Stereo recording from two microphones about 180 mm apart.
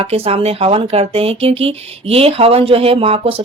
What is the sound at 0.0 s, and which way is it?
Speech, 35° right (ahead or behind).